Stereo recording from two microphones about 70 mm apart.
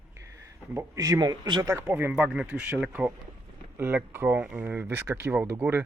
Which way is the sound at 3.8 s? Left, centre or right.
Right.